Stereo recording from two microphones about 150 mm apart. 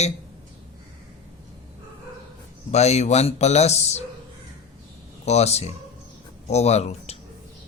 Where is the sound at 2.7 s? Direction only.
45° left (ahead or behind).